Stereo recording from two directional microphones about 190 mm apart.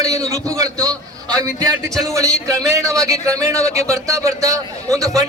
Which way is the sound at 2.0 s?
15° right (ahead or behind).